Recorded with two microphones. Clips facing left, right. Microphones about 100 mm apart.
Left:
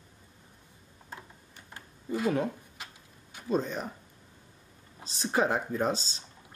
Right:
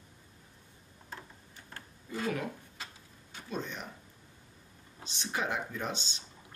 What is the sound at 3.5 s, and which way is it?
Speech, 40° left (ahead or behind).